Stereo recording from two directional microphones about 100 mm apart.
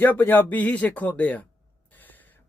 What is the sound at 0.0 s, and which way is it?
Speech, 20° left (ahead or behind).